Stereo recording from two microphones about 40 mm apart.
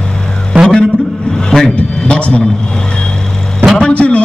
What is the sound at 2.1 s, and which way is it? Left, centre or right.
Vehicle, left.